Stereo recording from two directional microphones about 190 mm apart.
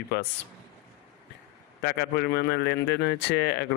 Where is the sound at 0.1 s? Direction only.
60° left (ahead or behind).